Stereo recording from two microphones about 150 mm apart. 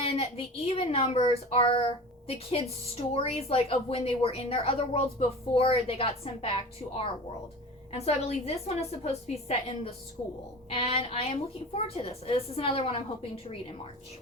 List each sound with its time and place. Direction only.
0.0 s a child's voice: 40° left (ahead or behind)